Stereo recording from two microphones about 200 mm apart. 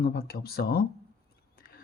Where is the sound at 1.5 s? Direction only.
45° left (ahead or behind).